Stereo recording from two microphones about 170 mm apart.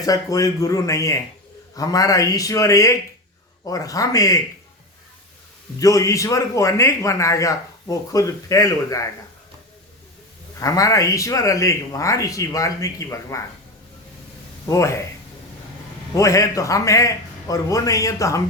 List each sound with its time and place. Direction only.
0.0 s a man's voice: 20° left (ahead or behind)
5.8 s a man's voice: 20° left (ahead or behind)
10.6 s a man's voice: 20° left (ahead or behind)
14.7 s speech: 15° left (ahead or behind)
16.1 s a man's voice: 20° left (ahead or behind)